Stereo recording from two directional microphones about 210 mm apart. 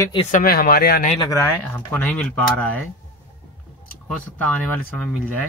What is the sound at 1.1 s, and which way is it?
Speech, 20° left (ahead or behind).